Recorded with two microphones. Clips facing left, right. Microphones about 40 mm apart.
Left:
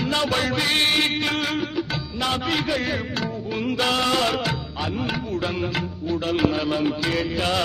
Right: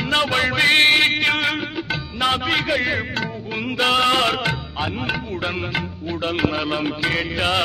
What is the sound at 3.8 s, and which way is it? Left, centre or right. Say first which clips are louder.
Music: right 5 dB; right.